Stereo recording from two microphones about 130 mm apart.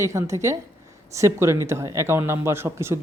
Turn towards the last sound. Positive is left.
turn(degrees=-20)  # may be behind; listen again after turning